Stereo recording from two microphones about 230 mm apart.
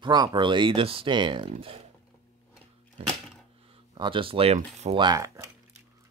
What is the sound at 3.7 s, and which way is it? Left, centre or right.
Speech, right.